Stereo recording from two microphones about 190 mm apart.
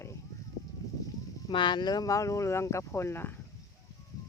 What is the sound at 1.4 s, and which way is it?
Speech, 25° left (ahead or behind).